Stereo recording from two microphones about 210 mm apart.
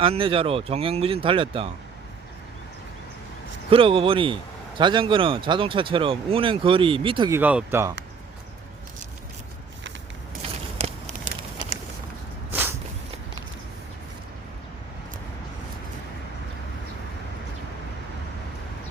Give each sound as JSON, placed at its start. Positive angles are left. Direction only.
{"t": 0.0, "sound": "speech", "side_deg": -25}
{"t": 3.7, "sound": "speech", "side_deg": -25}
{"t": 7.3, "sound": "speech", "side_deg": -10}
{"t": 10.8, "sound": "a sound", "side_deg": -30}
{"t": 12.5, "sound": "walk", "side_deg": -10}